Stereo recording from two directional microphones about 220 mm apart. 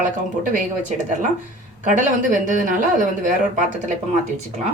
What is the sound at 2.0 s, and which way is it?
Speech, 35° right (ahead or behind).